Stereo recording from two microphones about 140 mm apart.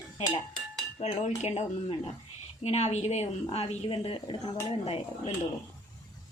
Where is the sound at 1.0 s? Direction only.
50° left (ahead or behind).